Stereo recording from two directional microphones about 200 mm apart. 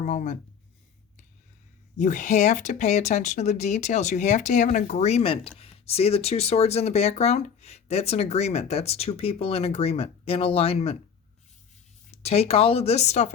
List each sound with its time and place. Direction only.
0.0 s speech: 40° left (ahead or behind)
2.0 s speech: 40° left (ahead or behind)
12.1 s speech: 30° left (ahead or behind)